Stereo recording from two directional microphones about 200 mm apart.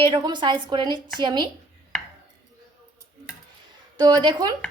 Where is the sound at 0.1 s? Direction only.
20° right (ahead or behind).